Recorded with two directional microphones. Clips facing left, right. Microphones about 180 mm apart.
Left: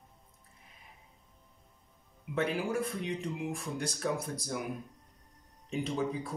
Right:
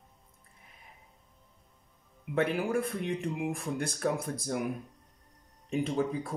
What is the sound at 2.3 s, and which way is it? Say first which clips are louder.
A man's voice: right 3 dB; 55° right (ahead or behind).